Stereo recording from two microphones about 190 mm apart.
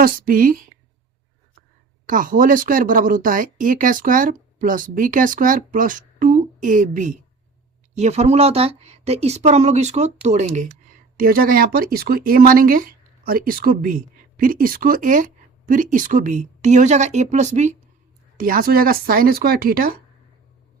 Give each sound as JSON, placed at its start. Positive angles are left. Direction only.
{"t": 0.0, "sound": "speech", "side_deg": -50}
{"t": 2.0, "sound": "speech", "side_deg": -45}